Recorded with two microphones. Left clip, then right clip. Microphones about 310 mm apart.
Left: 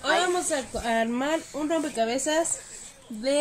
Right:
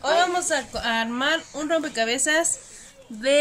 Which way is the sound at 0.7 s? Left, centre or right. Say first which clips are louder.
Right 1 dB; right.